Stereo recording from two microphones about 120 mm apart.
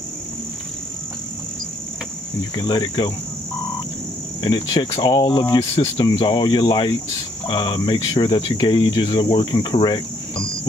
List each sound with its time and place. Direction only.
2.5 s cricket: 35° left (ahead or behind)
4.4 s cricket: 35° left (ahead or behind)